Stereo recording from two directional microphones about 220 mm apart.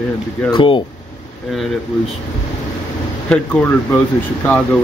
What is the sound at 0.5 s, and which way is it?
Speech, 25° left (ahead or behind).